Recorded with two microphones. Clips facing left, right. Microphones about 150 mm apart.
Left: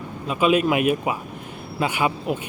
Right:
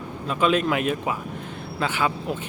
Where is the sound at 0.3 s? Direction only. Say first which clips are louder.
Left 2 dB; 10° left (ahead or behind).